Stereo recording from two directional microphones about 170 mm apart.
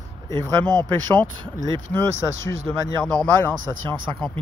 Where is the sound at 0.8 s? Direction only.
10° left (ahead or behind).